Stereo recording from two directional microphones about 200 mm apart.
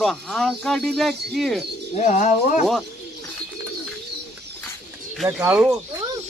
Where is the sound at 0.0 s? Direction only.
Centre (ahead or behind).